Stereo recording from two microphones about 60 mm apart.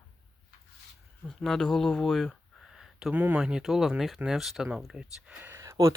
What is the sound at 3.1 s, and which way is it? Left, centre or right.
Speech, right.